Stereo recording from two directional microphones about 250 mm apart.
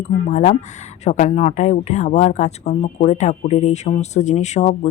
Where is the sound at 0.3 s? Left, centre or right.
Left.